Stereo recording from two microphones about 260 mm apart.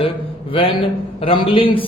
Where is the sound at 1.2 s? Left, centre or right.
Centre.